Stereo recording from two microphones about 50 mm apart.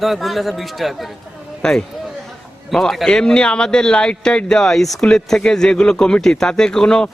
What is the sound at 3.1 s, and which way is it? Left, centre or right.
Speech, centre.